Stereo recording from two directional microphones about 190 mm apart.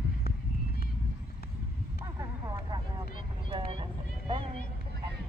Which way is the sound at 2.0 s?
20° right (ahead or behind).